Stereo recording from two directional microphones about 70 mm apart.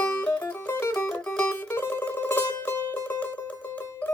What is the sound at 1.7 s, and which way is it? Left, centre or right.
Mandolin, left.